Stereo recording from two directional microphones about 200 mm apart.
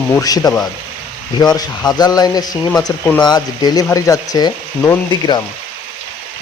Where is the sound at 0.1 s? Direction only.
20° left (ahead or behind).